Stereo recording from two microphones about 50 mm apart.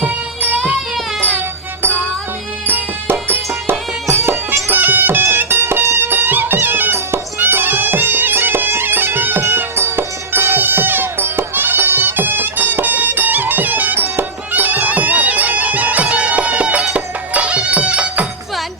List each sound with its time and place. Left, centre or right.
2.6 s music: right
5.8 s music: right
6.1 s music: right